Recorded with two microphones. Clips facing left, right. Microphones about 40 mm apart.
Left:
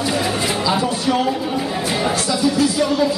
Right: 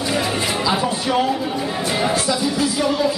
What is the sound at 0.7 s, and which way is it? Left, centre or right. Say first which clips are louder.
Speech: left 2 dB; centre.